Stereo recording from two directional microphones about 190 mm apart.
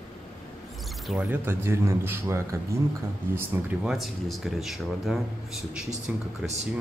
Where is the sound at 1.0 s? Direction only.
10° right (ahead or behind).